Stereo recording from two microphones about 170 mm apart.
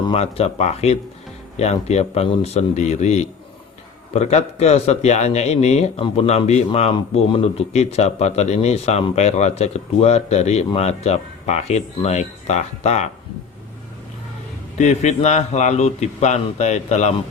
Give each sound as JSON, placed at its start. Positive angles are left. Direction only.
{"t": 0.1, "sound": "a man's voice", "side_deg": 35}
{"t": 14.8, "sound": "a man's voice", "side_deg": 40}